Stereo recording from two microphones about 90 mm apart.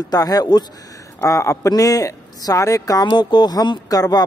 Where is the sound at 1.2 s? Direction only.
35° left (ahead or behind).